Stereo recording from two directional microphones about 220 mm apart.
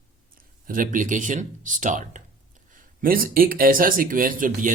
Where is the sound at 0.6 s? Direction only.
40° right (ahead or behind).